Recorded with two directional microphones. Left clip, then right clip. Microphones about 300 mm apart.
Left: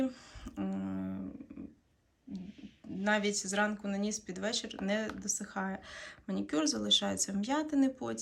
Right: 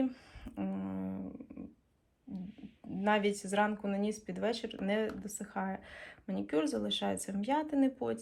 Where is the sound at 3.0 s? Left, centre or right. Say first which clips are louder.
Right 1 dB; centre.